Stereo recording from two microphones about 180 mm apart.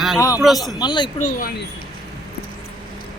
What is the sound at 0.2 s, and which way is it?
Speech, 20° left (ahead or behind).